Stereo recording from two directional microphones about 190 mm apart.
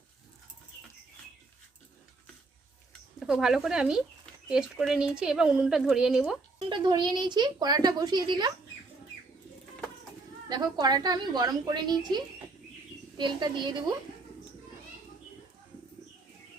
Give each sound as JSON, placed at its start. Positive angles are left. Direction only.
{"t": 3.2, "sound": "speech", "side_deg": -5}
{"t": 6.7, "sound": "a woman's voice", "side_deg": -25}
{"t": 10.5, "sound": "a woman's voice", "side_deg": -20}